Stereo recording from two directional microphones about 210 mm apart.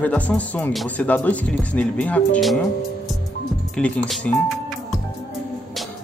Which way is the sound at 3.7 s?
5° left (ahead or behind).